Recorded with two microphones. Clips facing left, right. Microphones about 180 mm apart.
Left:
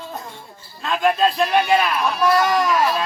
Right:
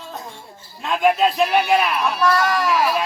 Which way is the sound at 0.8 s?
10° right (ahead or behind).